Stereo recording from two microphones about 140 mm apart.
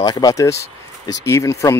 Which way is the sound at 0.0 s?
25° left (ahead or behind).